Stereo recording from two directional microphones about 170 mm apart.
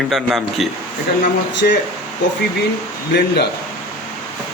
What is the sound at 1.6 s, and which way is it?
Speech, 65° left (ahead or behind).